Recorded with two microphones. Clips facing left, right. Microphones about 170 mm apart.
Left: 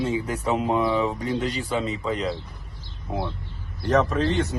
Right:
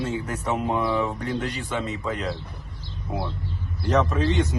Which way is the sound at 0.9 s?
10° left (ahead or behind).